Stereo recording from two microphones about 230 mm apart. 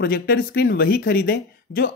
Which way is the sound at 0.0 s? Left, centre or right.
Left.